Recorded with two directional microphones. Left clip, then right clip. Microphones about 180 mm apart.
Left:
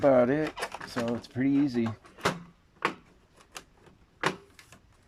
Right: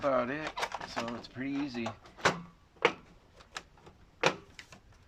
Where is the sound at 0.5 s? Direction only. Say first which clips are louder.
Even; 5° left (ahead or behind).